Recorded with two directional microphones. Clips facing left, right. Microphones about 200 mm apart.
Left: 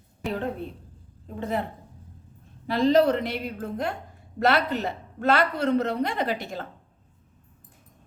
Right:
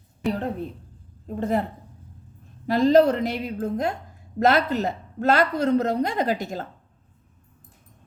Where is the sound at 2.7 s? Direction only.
45° right (ahead or behind).